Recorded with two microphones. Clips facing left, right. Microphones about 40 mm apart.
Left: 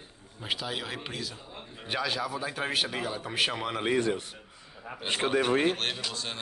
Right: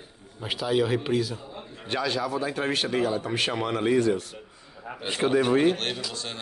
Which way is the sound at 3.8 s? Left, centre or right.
Left.